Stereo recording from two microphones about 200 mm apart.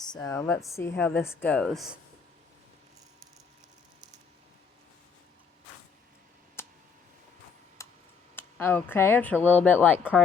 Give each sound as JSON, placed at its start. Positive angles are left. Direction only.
{"t": 0.0, "sound": "speech", "side_deg": 20}
{"t": 6.6, "sound": "a sound", "side_deg": 10}
{"t": 7.8, "sound": "tick-tock", "side_deg": 15}
{"t": 8.4, "sound": "speech", "side_deg": 10}
{"t": 10.0, "sound": "speech", "side_deg": -5}